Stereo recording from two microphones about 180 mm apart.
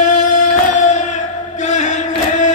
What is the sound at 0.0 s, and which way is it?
Music, 40° left (ahead or behind).